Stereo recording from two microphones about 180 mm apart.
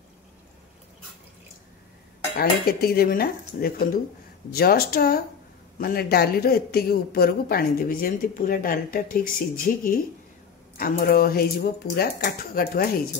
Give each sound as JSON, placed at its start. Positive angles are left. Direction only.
{"t": 2.3, "sound": "speech", "side_deg": 55}